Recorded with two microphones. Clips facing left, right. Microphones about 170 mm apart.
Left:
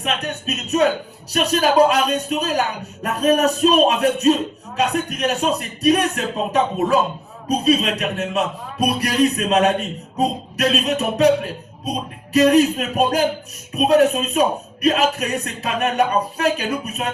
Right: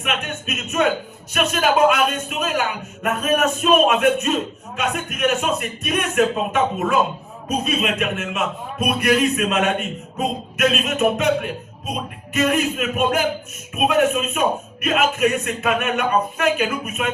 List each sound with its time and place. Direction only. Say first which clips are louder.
0.0 s a man's voice: left 2 dB; 35° left (ahead or behind)